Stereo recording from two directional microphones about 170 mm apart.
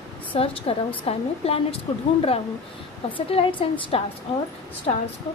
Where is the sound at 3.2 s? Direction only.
35° left (ahead or behind).